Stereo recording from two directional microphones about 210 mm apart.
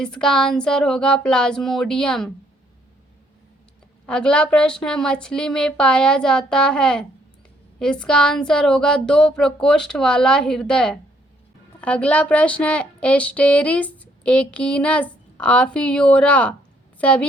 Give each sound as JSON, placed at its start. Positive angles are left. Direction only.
{"t": 0.0, "sound": "a woman's voice", "side_deg": 5}
{"t": 4.0, "sound": "a woman's voice", "side_deg": 5}